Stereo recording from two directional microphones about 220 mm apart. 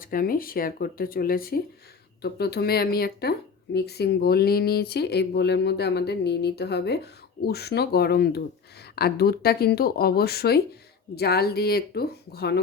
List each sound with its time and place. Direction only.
0.0 s speech: 40° left (ahead or behind)